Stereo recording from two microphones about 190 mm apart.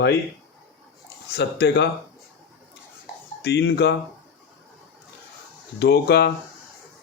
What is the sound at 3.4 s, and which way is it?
Speech, 65° left (ahead or behind).